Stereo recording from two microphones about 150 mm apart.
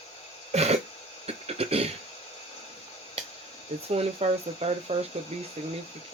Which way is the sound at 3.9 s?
40° right (ahead or behind).